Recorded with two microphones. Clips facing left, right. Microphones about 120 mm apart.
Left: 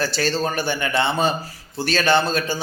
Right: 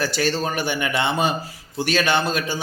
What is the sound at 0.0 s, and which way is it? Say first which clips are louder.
A man's voice: even; 15° right (ahead or behind).